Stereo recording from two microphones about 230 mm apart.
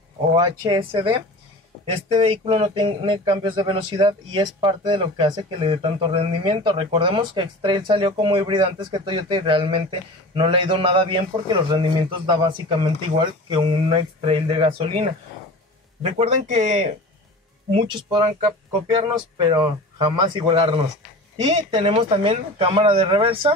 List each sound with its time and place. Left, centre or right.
0.4 s speech: right